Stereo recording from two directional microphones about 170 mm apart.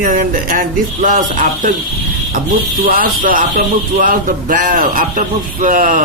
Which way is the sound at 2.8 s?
55° right (ahead or behind).